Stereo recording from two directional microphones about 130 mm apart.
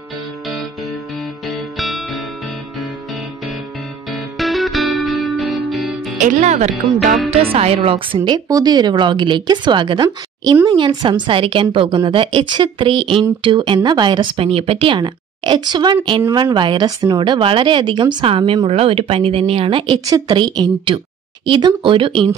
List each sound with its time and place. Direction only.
1.5 s music: centre (ahead or behind)
4.4 s music: centre (ahead or behind)
6.1 s speech: 70° right (ahead or behind)
7.2 s speech: 50° right (ahead or behind)
8.5 s a woman's voice: 30° right (ahead or behind); by 20.0 s 45° right (ahead or behind)
20.1 s a woman's voice: 30° right (ahead or behind)